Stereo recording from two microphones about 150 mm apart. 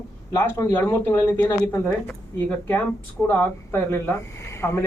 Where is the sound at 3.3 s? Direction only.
15° left (ahead or behind).